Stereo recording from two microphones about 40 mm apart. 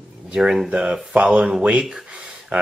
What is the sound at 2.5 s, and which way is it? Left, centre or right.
Speech, right.